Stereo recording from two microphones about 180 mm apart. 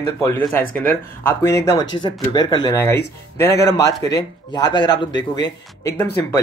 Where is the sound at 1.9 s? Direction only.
25° left (ahead or behind).